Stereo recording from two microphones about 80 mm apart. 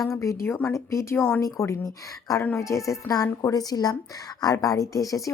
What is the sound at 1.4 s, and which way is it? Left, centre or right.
A woman's voice, left.